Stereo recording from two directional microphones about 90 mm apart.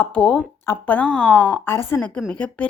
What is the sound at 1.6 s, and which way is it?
Speech, 25° left (ahead or behind).